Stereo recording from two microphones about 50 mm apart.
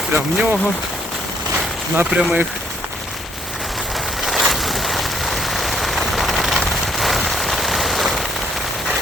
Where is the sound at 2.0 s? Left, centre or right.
Centre.